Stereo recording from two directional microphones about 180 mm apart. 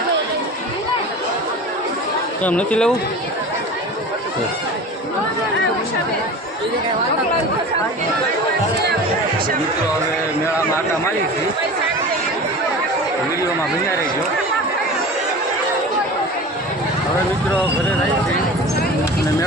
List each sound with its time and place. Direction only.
2.4 s speech: 5° left (ahead or behind)